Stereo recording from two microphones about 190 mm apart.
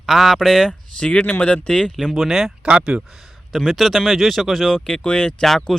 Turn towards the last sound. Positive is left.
turn(degrees=0)  # may be behind; listen again after turning